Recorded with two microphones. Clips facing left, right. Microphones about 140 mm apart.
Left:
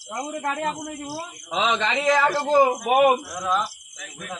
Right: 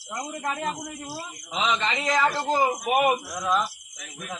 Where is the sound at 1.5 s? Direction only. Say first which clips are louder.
Left 3 dB; 65° left (ahead or behind).